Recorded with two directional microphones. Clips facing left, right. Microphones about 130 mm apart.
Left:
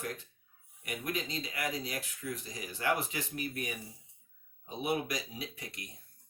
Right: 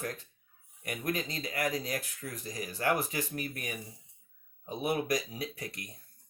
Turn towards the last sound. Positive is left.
turn(degrees=-45)  # may be behind; listen again after turning